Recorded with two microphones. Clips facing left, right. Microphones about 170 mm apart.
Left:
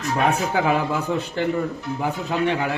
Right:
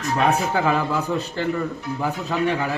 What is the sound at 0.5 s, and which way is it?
Speech, 15° left (ahead or behind).